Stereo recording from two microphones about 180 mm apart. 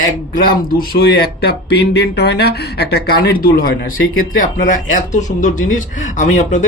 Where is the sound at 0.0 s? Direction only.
55° left (ahead or behind).